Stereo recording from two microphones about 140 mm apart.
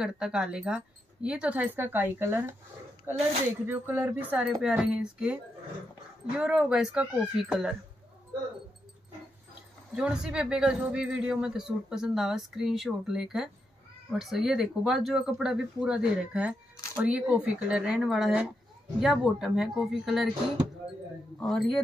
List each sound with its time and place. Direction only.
0.0 s speech: 5° right (ahead or behind)
9.9 s speech: 5° right (ahead or behind)
21.4 s speech: 5° left (ahead or behind)